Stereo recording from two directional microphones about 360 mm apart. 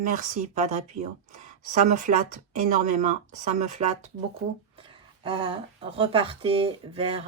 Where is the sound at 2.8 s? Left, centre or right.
Centre.